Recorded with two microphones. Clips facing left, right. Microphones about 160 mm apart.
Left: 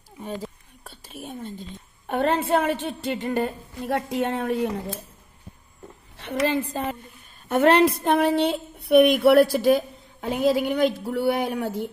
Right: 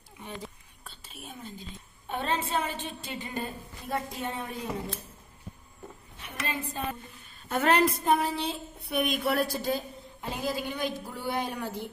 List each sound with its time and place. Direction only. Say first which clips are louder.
2.0 s speech: left 9 dB; 60° left (ahead or behind)
6.1 s a woman's voice: left 12 dB; 90° left
7.4 s speech: left 7 dB; 65° left (ahead or behind)